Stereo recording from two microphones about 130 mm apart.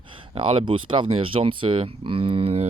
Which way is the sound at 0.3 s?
40° right (ahead or behind).